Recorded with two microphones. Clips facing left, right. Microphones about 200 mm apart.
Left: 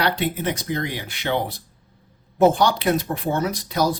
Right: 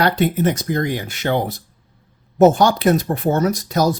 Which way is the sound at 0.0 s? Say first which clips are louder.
Right 6 dB; 45° right (ahead or behind).